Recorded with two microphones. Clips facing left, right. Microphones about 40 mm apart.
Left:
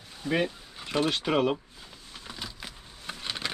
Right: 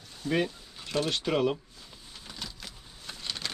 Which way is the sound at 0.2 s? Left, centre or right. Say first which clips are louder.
Left 1 dB; centre.